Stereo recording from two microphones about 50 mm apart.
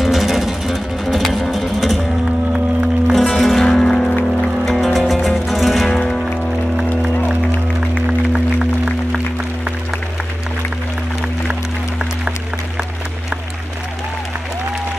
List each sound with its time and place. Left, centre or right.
0.0 s music: centre
3.1 s music: centre
6.8 s music: centre